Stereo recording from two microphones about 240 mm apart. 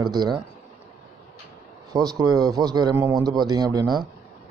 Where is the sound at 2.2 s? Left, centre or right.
Centre.